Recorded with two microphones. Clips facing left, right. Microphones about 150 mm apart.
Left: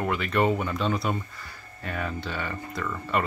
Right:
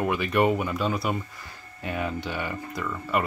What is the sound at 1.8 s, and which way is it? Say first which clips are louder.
Speech: right 2 dB; 15° right (ahead or behind).